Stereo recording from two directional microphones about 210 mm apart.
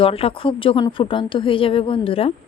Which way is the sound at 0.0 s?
25° left (ahead or behind).